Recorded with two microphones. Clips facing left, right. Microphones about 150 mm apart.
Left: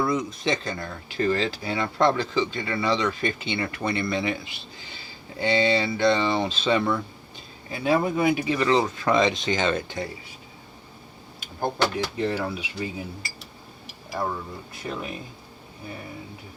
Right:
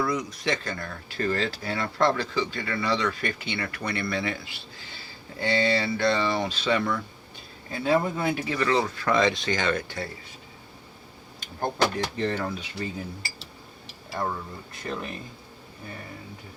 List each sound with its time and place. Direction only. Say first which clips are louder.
0.0 s speech: left 2 dB; 25° left (ahead or behind)
12.1 s speech: left 2 dB; 10° left (ahead or behind)
14.2 s speech: left 1 dB; 5° left (ahead or behind)